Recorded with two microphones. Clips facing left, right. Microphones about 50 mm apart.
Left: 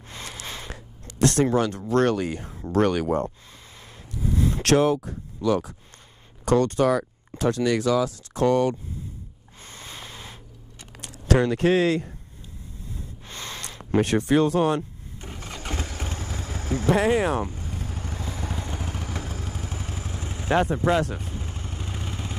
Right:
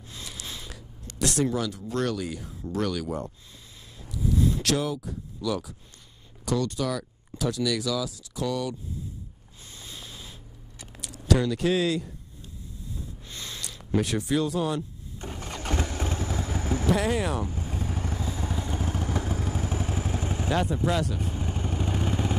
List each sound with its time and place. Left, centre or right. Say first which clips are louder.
0.1 s a sound: left 4 dB; left
1.2 s speech: left 6 dB; left
4.1 s a sound: even; left
6.4 s speech: left 8 dB; left
9.6 s a sound: left 4 dB; left
14.8 s vehicle: left 1 dB; left
15.7 s vehicle: right 4 dB; right
16.8 s speech: left 6 dB; left
17.6 s vehicle: right 2 dB; right
18.2 s vehicle: right 1 dB; left
19.2 s vehicle: right 4 dB; right
20.6 s speech: left 4 dB; left
21.2 s vehicle: right 4 dB; right